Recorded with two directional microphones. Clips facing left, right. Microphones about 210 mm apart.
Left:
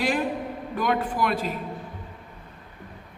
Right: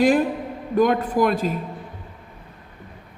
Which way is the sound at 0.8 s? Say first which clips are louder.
Right 7 dB; 45° right (ahead or behind).